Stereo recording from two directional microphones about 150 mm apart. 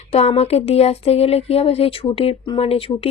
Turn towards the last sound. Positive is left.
turn(degrees=40)  # may be behind; listen again after turning